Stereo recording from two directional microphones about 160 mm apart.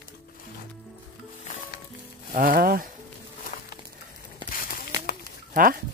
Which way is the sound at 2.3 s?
65° right (ahead or behind).